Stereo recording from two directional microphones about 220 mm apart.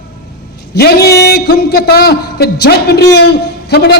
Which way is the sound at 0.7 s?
45° left (ahead or behind).